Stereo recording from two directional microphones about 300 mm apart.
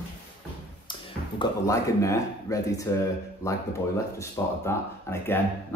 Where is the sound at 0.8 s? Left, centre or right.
Centre.